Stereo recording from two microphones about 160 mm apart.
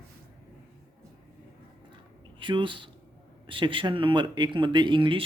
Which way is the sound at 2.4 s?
30° right (ahead or behind).